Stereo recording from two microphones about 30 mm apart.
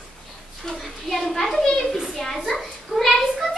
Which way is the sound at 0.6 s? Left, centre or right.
Centre.